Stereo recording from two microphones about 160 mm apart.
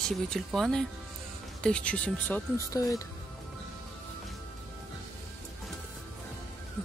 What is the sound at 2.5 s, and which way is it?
Speech, 20° left (ahead or behind).